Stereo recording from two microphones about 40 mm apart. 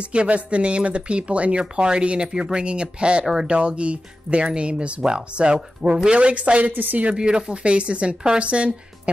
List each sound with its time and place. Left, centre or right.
0.0 s speech: right
6.7 s speech: right
7.2 s speech: right